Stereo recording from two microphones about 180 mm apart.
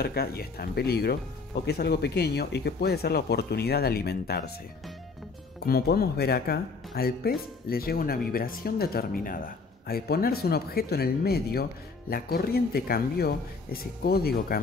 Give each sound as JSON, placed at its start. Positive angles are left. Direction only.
{"t": 0.0, "sound": "speech", "side_deg": 60}
{"t": 5.7, "sound": "speech", "side_deg": 60}